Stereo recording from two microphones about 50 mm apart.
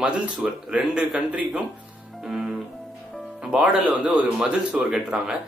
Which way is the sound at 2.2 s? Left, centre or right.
Centre.